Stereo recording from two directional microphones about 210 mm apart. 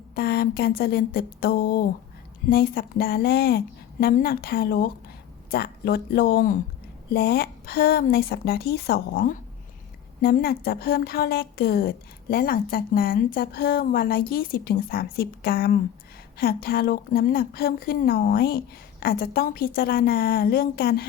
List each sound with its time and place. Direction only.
0.2 s a woman's voice: 50° left (ahead or behind)